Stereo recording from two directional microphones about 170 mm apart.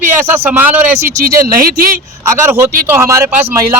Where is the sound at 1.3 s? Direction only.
60° right (ahead or behind).